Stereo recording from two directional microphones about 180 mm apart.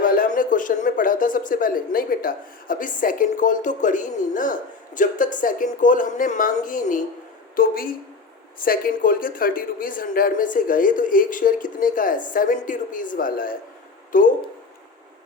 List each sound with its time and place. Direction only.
0.0 s a man's voice: 50° left (ahead or behind)